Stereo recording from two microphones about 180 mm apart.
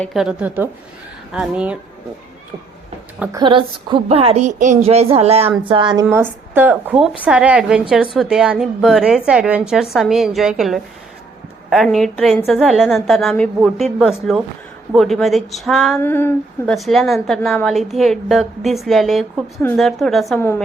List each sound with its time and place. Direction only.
0.0 s a woman's voice: centre (ahead or behind)
3.3 s a woman's voice: 25° right (ahead or behind)
6.1 s a woman's voice: 10° right (ahead or behind)
16.0 s speech: 10° left (ahead or behind)
16.7 s a woman's voice: centre (ahead or behind)